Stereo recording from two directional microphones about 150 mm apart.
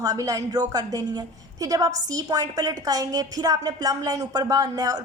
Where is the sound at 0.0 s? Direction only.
25° right (ahead or behind).